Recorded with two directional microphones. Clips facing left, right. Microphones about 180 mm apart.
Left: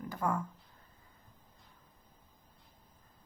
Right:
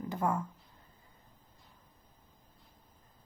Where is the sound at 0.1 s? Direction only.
20° right (ahead or behind).